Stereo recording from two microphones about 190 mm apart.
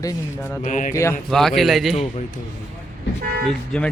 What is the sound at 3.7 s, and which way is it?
Speech, 5° left (ahead or behind).